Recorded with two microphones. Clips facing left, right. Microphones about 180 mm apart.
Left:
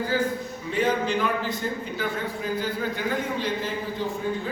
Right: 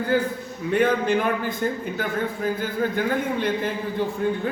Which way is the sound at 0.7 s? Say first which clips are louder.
Right 4 dB; 55° right (ahead or behind).